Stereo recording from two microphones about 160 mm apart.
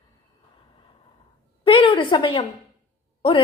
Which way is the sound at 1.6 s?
35° left (ahead or behind).